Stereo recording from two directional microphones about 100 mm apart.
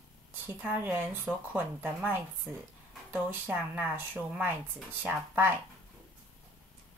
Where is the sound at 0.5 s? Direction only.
20° right (ahead or behind).